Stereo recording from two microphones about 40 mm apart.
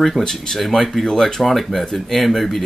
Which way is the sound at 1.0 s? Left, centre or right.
Centre.